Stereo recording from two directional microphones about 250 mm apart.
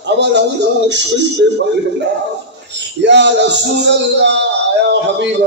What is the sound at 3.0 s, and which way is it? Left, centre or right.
Speech, right.